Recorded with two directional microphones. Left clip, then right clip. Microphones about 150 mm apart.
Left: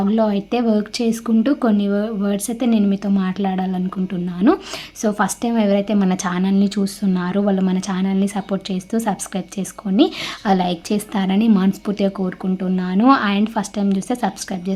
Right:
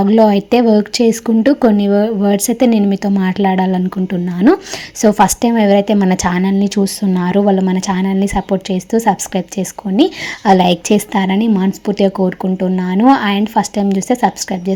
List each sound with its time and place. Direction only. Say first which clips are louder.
0.0 s a woman's voice: right 8 dB; 30° right (ahead or behind)